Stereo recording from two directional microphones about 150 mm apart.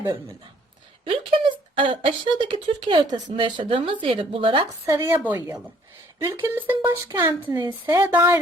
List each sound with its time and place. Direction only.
1.0 s speech: 35° right (ahead or behind)
4.9 s a woman's voice: 15° right (ahead or behind)
8.0 s a woman's voice: 15° right (ahead or behind)